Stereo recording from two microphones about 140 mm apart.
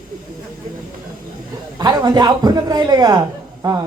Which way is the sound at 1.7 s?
30° right (ahead or behind).